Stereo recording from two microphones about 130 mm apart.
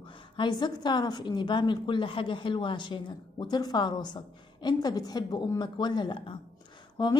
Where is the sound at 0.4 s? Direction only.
35° left (ahead or behind).